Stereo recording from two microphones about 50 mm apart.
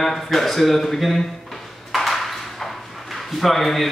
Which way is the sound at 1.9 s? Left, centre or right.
Centre.